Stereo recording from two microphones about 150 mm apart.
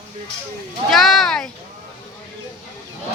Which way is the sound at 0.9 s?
Centre (ahead or behind).